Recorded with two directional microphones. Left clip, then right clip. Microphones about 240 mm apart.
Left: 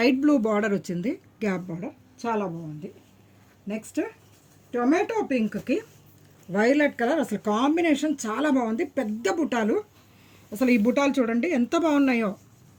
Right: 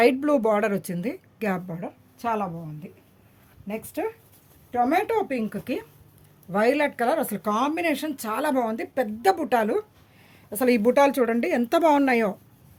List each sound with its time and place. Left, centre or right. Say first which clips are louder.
0.0 s speech: right 2 dB; right
3.7 s speech: right 1 dB; right